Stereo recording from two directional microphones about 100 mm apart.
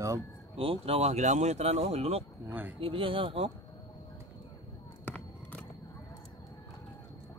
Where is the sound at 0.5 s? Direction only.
75° right (ahead or behind); by 2.2 s 90° right.